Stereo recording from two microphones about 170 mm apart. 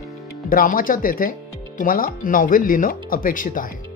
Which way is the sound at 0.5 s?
55° left (ahead or behind).